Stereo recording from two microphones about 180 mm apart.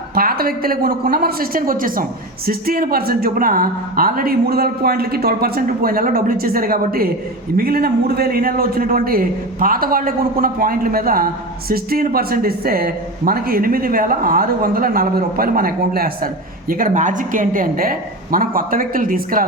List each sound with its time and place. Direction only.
0.1 s speech: 55° right (ahead or behind)